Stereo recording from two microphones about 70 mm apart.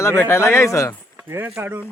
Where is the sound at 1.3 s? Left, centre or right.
Right.